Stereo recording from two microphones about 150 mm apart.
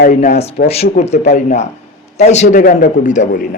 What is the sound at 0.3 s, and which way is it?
A man's voice, 45° left (ahead or behind).